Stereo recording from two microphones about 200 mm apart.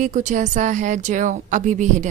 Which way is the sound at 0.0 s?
40° right (ahead or behind).